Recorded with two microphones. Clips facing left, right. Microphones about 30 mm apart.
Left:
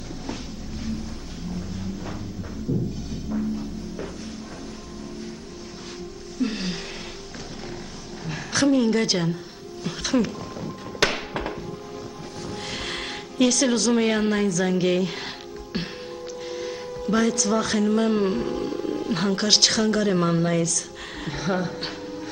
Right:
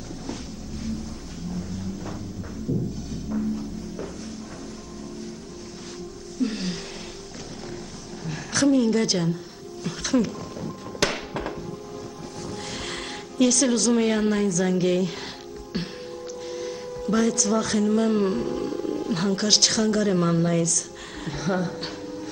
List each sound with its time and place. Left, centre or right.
3.3 s music: centre
6.4 s a sound: centre
8.3 s a woman's voice: centre
9.8 s music: centre
12.4 s speech: centre
16.4 s speech: centre